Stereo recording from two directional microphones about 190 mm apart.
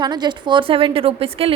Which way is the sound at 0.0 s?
20° right (ahead or behind).